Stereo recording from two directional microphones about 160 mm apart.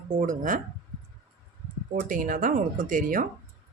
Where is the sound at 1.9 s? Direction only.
60° right (ahead or behind).